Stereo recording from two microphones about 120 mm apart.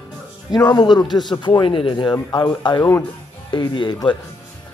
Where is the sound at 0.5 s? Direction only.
35° left (ahead or behind).